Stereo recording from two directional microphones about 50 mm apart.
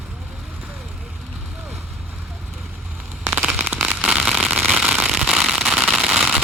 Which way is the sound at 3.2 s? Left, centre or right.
Right.